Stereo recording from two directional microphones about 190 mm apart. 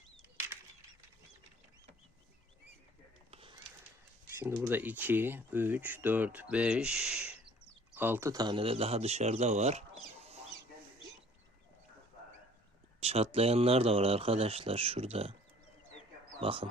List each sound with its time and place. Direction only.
3.3 s a sound: 30° right (ahead or behind)
4.4 s speech: 10° right (ahead or behind); by 9.8 s 35° right (ahead or behind)
13.0 s speech: 30° right (ahead or behind)
16.4 s speech: 30° right (ahead or behind)